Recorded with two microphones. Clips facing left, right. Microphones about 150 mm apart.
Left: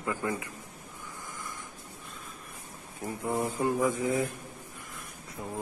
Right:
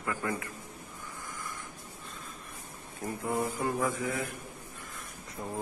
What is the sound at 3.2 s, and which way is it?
Mantra, 20° left (ahead or behind).